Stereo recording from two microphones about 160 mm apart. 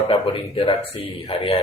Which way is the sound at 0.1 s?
35° left (ahead or behind).